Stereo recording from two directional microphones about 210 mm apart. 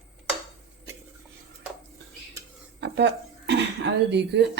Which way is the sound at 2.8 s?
55° right (ahead or behind).